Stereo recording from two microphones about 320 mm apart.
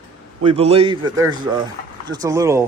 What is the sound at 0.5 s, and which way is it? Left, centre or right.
Speech, centre.